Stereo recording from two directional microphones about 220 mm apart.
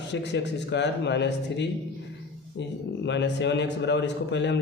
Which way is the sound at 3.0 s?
55° left (ahead or behind).